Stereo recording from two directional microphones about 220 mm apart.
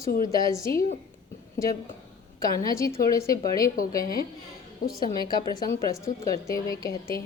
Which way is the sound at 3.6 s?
40° left (ahead or behind).